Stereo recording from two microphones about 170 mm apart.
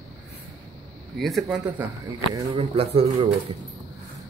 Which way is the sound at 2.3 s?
35° right (ahead or behind).